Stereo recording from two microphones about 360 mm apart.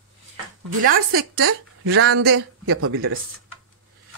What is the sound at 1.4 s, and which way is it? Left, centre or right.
Speech, right.